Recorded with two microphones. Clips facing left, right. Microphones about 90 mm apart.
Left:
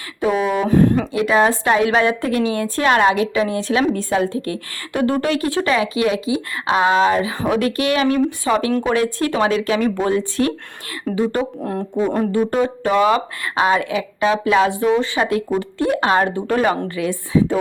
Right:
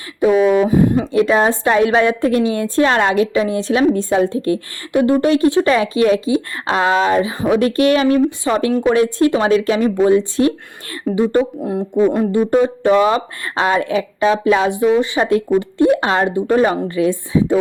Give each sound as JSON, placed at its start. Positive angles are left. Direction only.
{"t": 0.6, "sound": "speech", "side_deg": -10}
{"t": 1.1, "sound": "a woman's voice", "side_deg": -30}
{"t": 6.7, "sound": "speech", "side_deg": 25}
{"t": 7.1, "sound": "a woman's voice", "side_deg": -30}
{"t": 11.6, "sound": "speech", "side_deg": -5}
{"t": 12.3, "sound": "a woman's voice", "side_deg": -20}
{"t": 15.2, "sound": "a woman's voice", "side_deg": -30}